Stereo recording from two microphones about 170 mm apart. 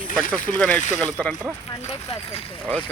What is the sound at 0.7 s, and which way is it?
Speech, 45° left (ahead or behind).